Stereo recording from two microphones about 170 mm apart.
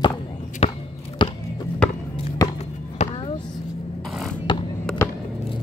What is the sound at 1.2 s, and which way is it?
Music, 30° left (ahead or behind).